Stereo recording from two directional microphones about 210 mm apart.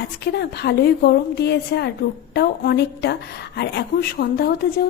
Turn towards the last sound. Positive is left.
turn(degrees=45)  # may be behind; listen again after turning